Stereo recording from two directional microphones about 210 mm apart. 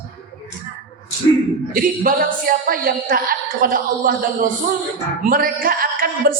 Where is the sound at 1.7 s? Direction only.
45° right (ahead or behind).